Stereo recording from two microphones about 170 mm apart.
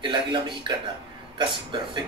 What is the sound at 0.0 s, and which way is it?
Speech, 30° right (ahead or behind).